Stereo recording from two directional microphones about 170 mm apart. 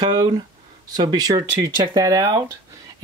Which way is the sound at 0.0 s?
25° right (ahead or behind).